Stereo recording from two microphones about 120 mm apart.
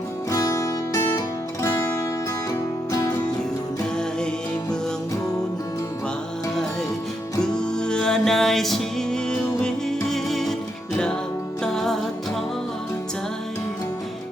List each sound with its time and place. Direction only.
0.3 s music: 30° left (ahead or behind)
7.5 s music: 5° left (ahead or behind)
11.6 s music: 5° left (ahead or behind)